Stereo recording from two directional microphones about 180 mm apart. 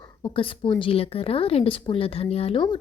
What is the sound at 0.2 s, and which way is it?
A woman's voice, 30° left (ahead or behind).